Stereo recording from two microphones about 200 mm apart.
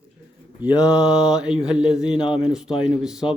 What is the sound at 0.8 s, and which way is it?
Speech, 5° right (ahead or behind).